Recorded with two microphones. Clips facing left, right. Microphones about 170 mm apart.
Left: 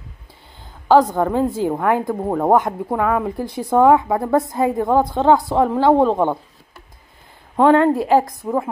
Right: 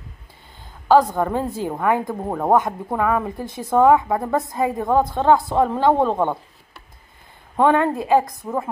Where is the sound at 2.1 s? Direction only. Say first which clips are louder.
Left 3 dB; 5° left (ahead or behind).